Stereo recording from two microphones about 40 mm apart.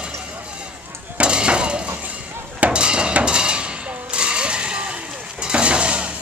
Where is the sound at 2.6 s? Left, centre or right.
Right.